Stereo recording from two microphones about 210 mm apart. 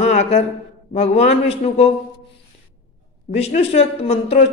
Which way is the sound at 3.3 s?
30° left (ahead or behind).